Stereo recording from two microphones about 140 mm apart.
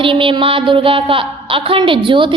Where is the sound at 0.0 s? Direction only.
40° right (ahead or behind).